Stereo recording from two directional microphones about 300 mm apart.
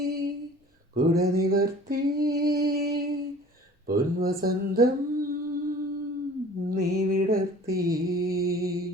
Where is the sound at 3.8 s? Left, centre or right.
Right.